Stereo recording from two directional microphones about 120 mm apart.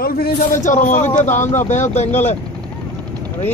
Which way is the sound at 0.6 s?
90° left.